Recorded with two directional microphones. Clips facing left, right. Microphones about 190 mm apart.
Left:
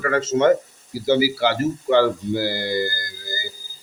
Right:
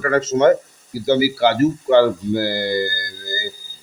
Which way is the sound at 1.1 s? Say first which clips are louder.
Right 2 dB; 45° right (ahead or behind).